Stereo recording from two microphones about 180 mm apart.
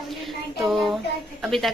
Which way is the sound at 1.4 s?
Centre (ahead or behind).